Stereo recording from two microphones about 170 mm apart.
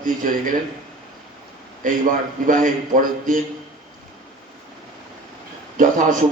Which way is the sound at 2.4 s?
50° right (ahead or behind).